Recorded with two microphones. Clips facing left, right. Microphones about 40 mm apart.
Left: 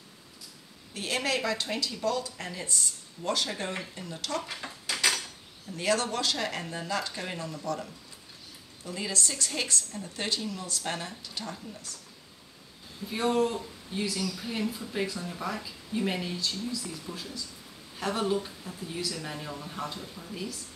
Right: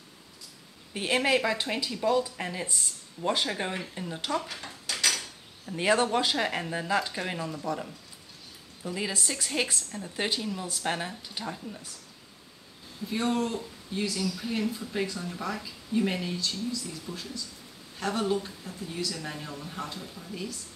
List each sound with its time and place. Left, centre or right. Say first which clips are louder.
0.9 s speech: right 5 dB; right
4.4 s dishes: even; centre
5.7 s a woman's voice: right 4 dB; right
13.1 s speech: left 2 dB; centre